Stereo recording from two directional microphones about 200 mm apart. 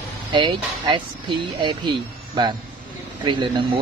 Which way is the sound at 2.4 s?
20° right (ahead or behind).